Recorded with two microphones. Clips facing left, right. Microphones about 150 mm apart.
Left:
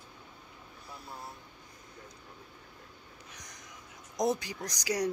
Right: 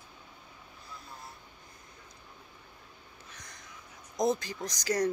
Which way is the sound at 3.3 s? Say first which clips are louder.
Even; 15° left (ahead or behind).